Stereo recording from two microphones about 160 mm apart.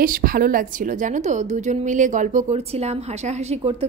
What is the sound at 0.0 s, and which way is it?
Speech, 60° right (ahead or behind).